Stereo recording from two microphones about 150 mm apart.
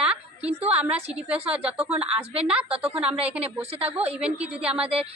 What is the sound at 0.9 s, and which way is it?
Speech, 45° right (ahead or behind).